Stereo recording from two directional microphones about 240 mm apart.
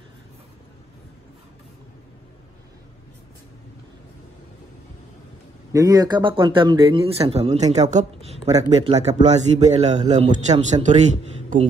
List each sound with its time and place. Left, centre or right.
5.7 s speech: centre; by 11.1 s right